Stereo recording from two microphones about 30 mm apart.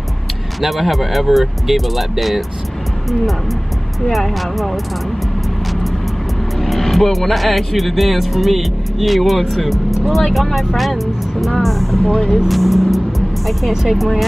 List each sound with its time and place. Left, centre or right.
0.6 s speech: centre
4.4 s speech: centre
6.6 s speech: centre
12.0 s speech: left
12.4 s speech: centre